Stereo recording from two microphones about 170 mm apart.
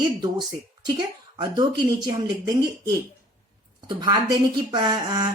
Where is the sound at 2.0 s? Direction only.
25° right (ahead or behind).